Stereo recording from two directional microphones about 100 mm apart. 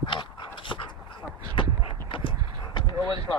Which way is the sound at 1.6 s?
60° left (ahead or behind).